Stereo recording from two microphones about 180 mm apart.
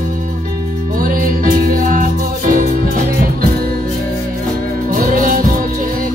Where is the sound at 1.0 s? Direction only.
50° right (ahead or behind).